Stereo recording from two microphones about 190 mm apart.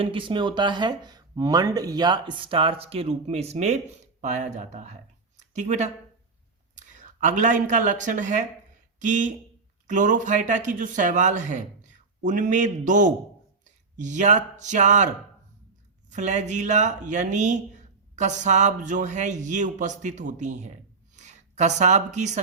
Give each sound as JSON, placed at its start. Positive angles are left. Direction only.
{"t": 0.0, "sound": "speech", "side_deg": -25}